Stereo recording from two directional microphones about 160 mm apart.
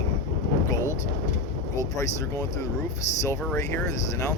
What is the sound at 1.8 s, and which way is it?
Speech, 20° left (ahead or behind).